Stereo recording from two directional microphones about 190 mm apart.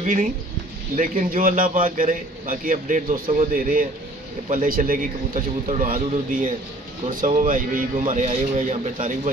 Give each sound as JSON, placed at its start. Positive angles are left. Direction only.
{"t": 0.0, "sound": "a man's voice", "side_deg": -45}